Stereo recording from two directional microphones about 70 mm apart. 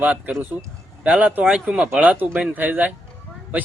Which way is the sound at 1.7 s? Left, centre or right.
Centre.